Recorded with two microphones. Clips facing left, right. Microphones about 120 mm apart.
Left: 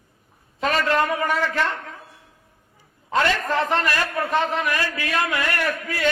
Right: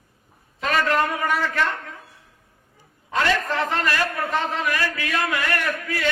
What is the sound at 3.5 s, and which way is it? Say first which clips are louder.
A man's voice: left 2 dB; 25° left (ahead or behind).